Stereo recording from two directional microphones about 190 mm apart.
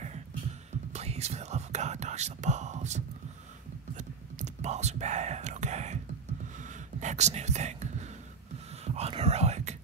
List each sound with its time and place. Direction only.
0.9 s whispering: 35° right (ahead or behind)
7.0 s speech: 40° right (ahead or behind)
8.8 s whispering: 35° right (ahead or behind)